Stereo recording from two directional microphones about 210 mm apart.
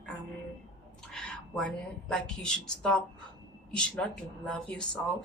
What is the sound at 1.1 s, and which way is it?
Speech, 5° left (ahead or behind).